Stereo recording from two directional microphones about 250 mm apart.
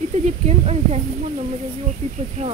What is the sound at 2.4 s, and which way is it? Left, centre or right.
Speech, right.